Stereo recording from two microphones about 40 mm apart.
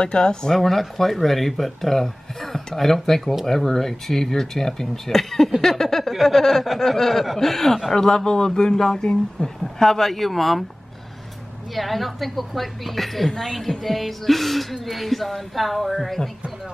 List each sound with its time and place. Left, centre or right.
0.0 s a man's voice: left
0.6 s speech: centre
7.9 s a man's voice: centre
11.7 s speech: centre